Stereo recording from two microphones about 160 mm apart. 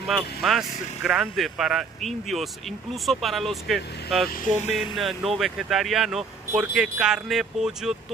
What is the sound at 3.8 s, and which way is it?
Speech, 90° left.